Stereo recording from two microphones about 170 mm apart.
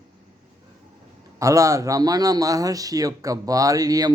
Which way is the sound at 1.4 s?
20° right (ahead or behind).